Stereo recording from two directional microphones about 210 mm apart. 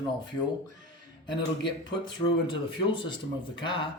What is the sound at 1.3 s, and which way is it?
Speech, 20° left (ahead or behind).